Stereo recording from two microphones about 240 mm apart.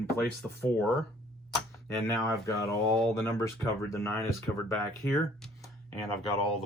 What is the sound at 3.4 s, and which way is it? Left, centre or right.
Speech, centre.